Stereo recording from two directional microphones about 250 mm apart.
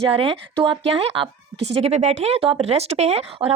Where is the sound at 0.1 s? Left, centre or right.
Right.